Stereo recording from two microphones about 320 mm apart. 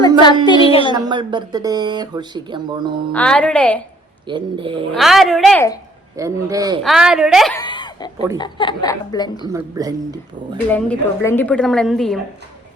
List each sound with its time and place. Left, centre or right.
0.4 s a woman's voice: centre
0.9 s speech: centre
3.1 s a woman's voice: centre
4.3 s speech: centre
4.9 s a woman's voice: centre
6.1 s a woman's voice: centre
7.6 s chuckle: centre
8.4 s a woman's voice: centre
9.5 s speech: centre
10.7 s a woman's voice: centre